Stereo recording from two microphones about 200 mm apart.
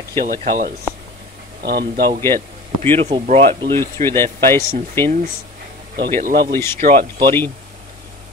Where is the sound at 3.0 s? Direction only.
30° right (ahead or behind).